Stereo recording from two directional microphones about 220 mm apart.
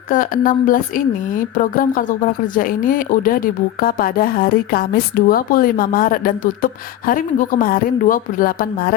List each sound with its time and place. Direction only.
0.1 s speech: 40° left (ahead or behind)